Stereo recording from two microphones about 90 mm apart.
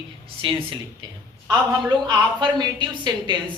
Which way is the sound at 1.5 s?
50° right (ahead or behind).